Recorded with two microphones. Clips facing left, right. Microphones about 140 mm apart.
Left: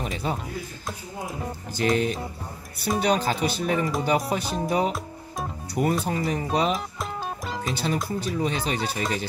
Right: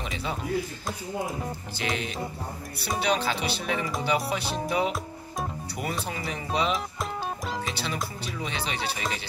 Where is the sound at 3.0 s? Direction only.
45° left (ahead or behind).